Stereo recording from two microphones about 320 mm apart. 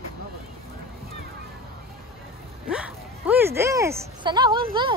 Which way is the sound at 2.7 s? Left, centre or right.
Centre.